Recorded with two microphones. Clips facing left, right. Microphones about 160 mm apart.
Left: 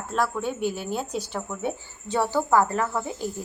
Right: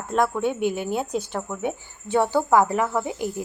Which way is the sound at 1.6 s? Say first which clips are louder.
Right 2 dB; 15° right (ahead or behind).